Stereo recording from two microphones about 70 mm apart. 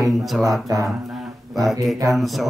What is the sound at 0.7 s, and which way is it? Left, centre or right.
Speech, right.